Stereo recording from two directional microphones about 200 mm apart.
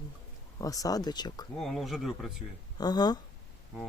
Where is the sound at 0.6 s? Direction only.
15° left (ahead or behind).